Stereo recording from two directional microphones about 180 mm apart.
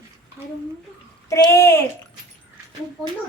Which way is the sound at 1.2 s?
15° left (ahead or behind).